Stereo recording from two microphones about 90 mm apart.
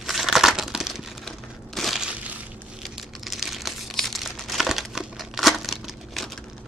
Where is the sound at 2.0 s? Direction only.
15° right (ahead or behind).